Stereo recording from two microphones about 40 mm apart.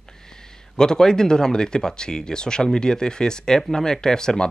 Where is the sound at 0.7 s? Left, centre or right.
Centre.